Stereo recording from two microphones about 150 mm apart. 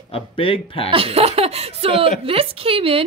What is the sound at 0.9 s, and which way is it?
A woman's voice, 40° right (ahead or behind).